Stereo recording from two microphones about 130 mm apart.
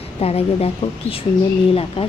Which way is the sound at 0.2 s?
50° left (ahead or behind).